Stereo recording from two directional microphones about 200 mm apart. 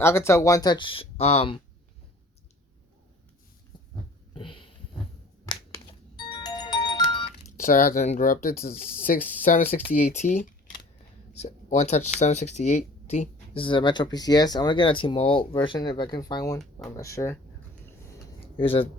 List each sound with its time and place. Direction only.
0.0 s speech: 15° left (ahead or behind)
4.4 s a sound: 25° left (ahead or behind)
5.5 s music: 20° left (ahead or behind)
7.5 s speech: 45° left (ahead or behind); by 17.3 s 15° left (ahead or behind)
18.5 s speech: 25° left (ahead or behind)